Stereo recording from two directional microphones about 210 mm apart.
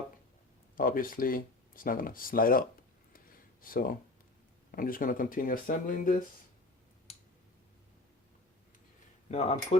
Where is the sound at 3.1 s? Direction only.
40° left (ahead or behind).